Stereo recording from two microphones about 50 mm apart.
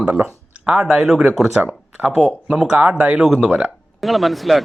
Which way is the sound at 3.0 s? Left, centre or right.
Right.